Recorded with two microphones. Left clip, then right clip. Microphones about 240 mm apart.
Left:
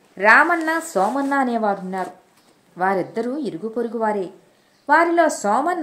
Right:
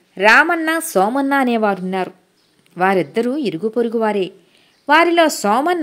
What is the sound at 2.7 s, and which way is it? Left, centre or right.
A woman's voice, right.